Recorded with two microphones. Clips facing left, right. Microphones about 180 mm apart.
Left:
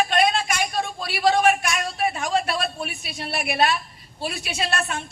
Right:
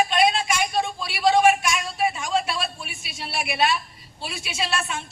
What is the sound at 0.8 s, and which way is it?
A man's voice, 55° left (ahead or behind).